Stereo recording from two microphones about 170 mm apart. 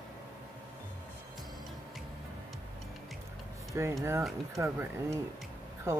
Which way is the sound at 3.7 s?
15° right (ahead or behind).